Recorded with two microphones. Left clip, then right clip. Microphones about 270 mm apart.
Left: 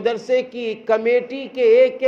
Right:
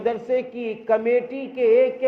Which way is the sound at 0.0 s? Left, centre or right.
Left.